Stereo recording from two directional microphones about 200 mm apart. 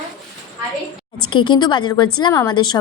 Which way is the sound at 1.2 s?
25° left (ahead or behind).